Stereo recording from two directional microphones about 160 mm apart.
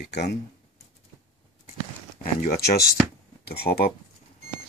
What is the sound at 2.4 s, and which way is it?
Speech, 70° left (ahead or behind).